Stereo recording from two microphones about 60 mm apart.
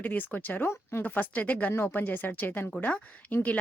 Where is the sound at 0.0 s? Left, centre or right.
Left.